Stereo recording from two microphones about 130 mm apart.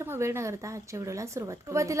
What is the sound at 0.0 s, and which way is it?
A woman's voice, 20° right (ahead or behind).